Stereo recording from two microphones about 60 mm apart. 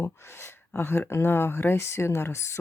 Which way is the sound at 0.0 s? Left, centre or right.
Left.